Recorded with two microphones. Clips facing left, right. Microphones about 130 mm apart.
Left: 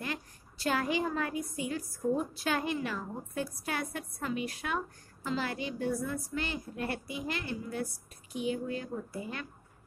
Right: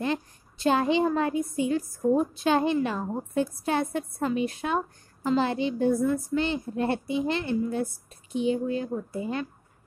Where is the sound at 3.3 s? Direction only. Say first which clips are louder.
Right 9 dB; 25° right (ahead or behind).